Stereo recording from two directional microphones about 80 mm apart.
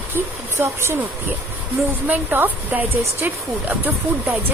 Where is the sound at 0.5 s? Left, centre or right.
Right.